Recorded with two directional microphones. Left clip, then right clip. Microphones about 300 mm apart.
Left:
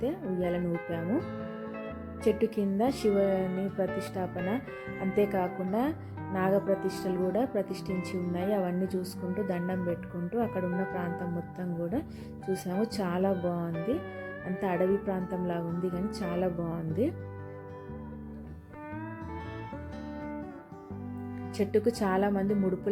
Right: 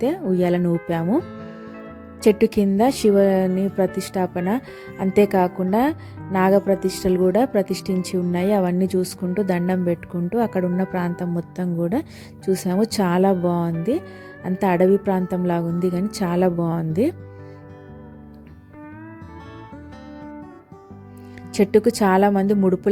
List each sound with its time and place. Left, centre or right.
0.0 s speech: right
1.2 s music: centre
2.2 s speech: right
21.5 s speech: right